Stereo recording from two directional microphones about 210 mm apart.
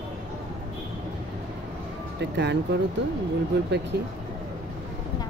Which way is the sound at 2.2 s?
55° right (ahead or behind).